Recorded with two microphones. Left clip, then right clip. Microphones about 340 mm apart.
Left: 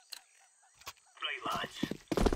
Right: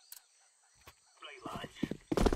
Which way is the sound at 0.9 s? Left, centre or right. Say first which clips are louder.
Left 12 dB; left.